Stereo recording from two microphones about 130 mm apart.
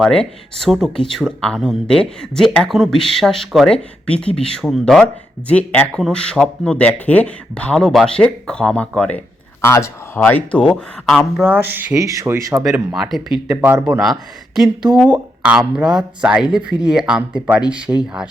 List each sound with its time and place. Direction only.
0.0 s speech: 5° left (ahead or behind)
9.6 s speech: 20° left (ahead or behind)
10.2 s speech: 10° left (ahead or behind)
11.4 s speech: 15° right (ahead or behind)
12.9 s speech: centre (ahead or behind)
13.5 s speech: 15° right (ahead or behind)
13.8 s speech: 5° right (ahead or behind)